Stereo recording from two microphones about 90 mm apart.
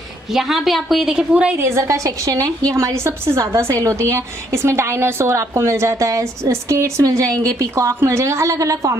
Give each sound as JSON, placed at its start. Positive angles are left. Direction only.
{"t": 0.3, "sound": "a woman's voice", "side_deg": -5}
{"t": 1.3, "sound": "a woman's voice", "side_deg": -15}
{"t": 1.6, "sound": "a woman's voice", "side_deg": -30}